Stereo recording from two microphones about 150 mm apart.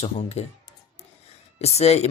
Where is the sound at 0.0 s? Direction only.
45° left (ahead or behind).